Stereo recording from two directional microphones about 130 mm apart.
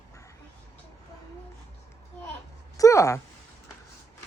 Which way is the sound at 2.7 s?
25° left (ahead or behind).